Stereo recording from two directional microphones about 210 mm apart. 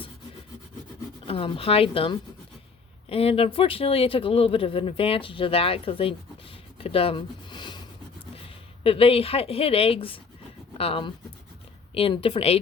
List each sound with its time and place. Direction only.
1.3 s speech: 25° left (ahead or behind)
6.7 s a sound: 25° left (ahead or behind)
8.8 s speech: 25° left (ahead or behind)